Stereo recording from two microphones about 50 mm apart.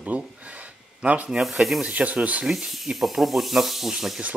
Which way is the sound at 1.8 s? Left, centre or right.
Right.